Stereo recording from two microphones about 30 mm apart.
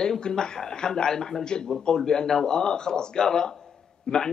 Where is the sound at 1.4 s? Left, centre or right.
Left.